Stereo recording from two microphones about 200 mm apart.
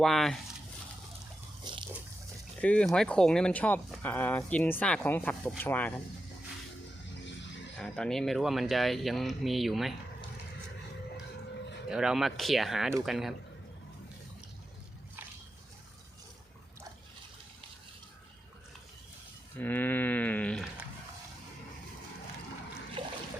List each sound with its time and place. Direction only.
0.0 s speech: centre (ahead or behind)
1.7 s pig: 20° right (ahead or behind)
2.6 s speech: 5° left (ahead or behind)
7.8 s speech: 5° left (ahead or behind)
11.9 s speech: 5° right (ahead or behind)
19.5 s speech: 10° left (ahead or behind)